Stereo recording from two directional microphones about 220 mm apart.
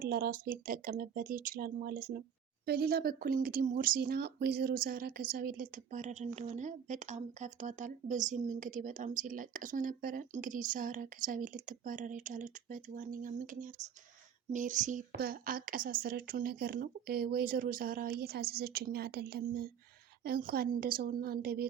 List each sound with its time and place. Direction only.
0.0 s a woman's voice: 40° right (ahead or behind)